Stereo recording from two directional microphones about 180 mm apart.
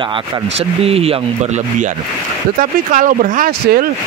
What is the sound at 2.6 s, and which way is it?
Speech, 50° right (ahead or behind).